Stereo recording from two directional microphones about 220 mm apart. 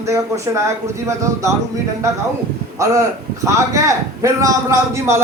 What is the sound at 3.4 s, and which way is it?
A man's voice, 15° right (ahead or behind).